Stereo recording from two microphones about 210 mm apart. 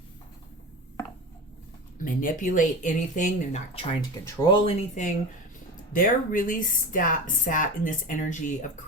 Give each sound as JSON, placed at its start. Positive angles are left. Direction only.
{"t": 2.0, "sound": "speech", "side_deg": 40}
{"t": 4.4, "sound": "speech", "side_deg": 25}
{"t": 5.9, "sound": "speech", "side_deg": 40}